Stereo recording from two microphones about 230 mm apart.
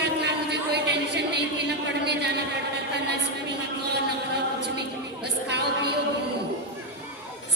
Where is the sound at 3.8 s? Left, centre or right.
Right.